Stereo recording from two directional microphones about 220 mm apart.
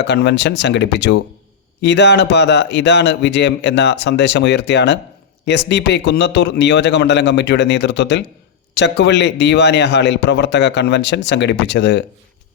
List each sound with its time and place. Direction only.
0.0 s a man's voice: 50° left (ahead or behind)